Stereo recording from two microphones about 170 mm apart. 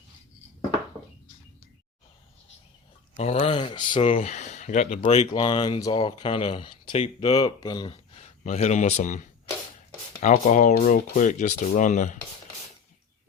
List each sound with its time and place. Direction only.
3.2 s speech: 40° left (ahead or behind)
5.3 s speech: 25° left (ahead or behind)
8.4 s speech: 40° left (ahead or behind)